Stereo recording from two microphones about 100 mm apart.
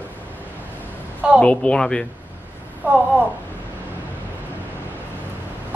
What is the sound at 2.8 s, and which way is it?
Speech, 15° right (ahead or behind).